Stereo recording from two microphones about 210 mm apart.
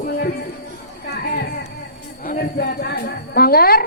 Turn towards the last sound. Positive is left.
turn(degrees=45)  # may be behind; listen again after turning